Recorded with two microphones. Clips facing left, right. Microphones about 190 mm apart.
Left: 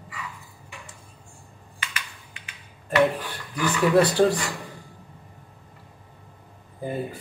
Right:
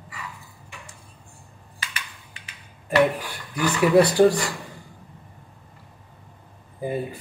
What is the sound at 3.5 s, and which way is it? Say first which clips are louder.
Speech: right 2 dB; 10° right (ahead or behind).